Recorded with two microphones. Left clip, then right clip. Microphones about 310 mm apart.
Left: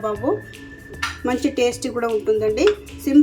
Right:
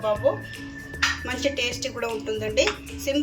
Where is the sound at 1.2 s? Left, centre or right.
Centre.